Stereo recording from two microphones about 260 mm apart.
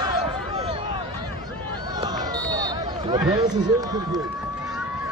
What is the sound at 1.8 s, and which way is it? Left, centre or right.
Run, centre.